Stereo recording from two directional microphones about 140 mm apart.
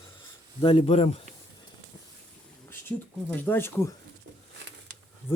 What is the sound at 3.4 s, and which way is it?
Speech, 15° left (ahead or behind).